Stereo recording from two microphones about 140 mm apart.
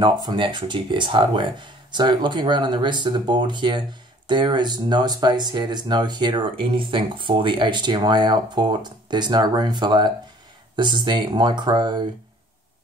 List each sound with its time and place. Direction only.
0.0 s speech: 30° right (ahead or behind)